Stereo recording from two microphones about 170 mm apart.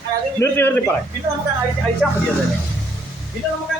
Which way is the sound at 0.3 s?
15° left (ahead or behind).